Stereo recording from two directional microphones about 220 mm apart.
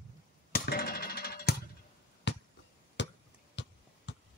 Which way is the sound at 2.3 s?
50° left (ahead or behind).